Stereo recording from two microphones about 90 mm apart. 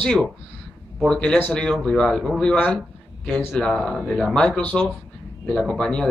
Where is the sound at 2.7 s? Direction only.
5° left (ahead or behind).